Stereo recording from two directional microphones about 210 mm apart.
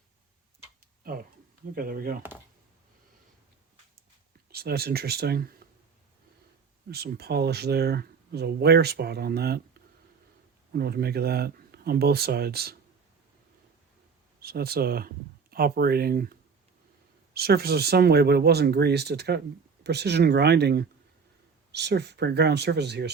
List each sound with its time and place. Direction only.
1.7 s speech: 45° right (ahead or behind)
4.4 s speech: 50° right (ahead or behind)
6.9 s speech: 50° right (ahead or behind)
10.7 s speech: 50° right (ahead or behind)
14.4 s speech: 50° right (ahead or behind)